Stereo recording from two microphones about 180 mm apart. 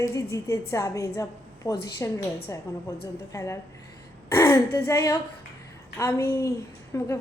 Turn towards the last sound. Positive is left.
turn(degrees=15)  # may be behind; listen again after turning